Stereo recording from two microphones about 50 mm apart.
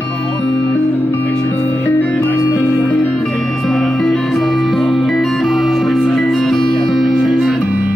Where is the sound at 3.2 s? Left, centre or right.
Centre.